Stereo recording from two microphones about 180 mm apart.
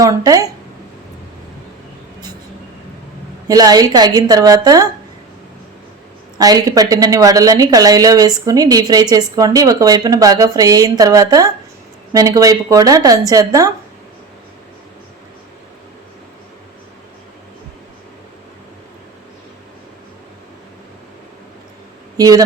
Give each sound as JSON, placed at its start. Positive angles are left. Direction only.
{"t": 0.0, "sound": "speech", "side_deg": -20}
{"t": 3.4, "sound": "speech", "side_deg": -20}
{"t": 6.4, "sound": "speech", "side_deg": -20}
{"t": 22.2, "sound": "speech", "side_deg": -20}